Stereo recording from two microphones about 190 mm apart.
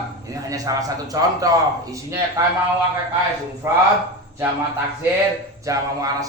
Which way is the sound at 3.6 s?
15° right (ahead or behind).